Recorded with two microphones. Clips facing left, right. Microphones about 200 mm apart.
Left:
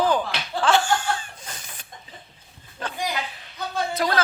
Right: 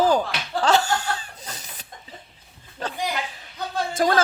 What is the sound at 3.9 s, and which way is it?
Speech, 45° right (ahead or behind).